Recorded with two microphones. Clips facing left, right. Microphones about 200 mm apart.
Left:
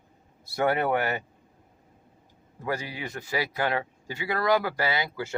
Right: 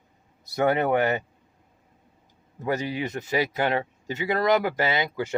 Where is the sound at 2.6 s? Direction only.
20° right (ahead or behind).